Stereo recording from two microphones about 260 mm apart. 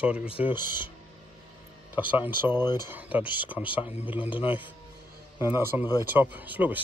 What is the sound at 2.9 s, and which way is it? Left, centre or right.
Speech, centre.